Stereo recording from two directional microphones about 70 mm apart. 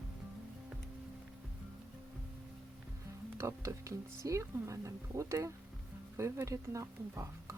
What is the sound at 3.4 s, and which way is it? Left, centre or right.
Speech, right.